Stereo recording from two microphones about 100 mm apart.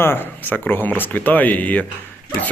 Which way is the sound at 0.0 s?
20° left (ahead or behind).